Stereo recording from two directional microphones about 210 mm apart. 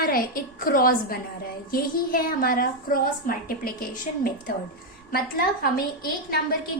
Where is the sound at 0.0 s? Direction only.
45° left (ahead or behind).